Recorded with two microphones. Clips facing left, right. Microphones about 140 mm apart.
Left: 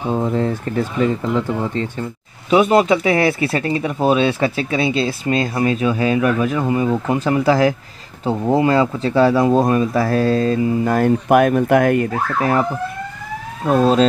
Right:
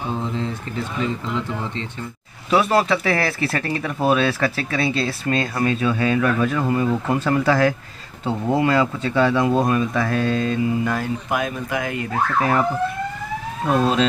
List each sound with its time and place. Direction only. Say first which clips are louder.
0.1 s speech: left 8 dB; 55° left (ahead or behind)
2.5 s speech: left 5 dB; 20° left (ahead or behind); by 11.0 s 40° left (ahead or behind)
11.0 s speech: left 10 dB; 55° left (ahead or behind)